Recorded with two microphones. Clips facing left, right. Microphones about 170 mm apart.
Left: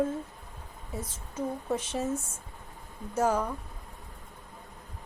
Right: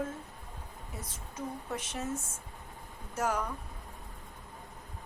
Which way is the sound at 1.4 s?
30° left (ahead or behind).